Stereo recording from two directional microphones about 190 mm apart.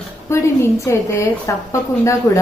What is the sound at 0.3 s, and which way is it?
A woman's voice, 15° left (ahead or behind).